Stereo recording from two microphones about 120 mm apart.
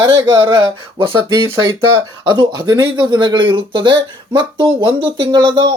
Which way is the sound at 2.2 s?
40° right (ahead or behind).